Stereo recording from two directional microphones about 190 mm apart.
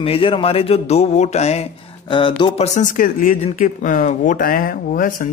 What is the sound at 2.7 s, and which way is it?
Speech, 45° left (ahead or behind).